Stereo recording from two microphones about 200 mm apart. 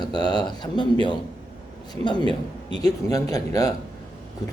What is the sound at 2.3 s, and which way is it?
A man's voice, 20° left (ahead or behind).